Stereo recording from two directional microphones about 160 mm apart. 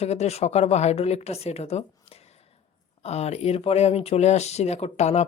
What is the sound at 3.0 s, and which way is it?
Speech, 40° left (ahead or behind).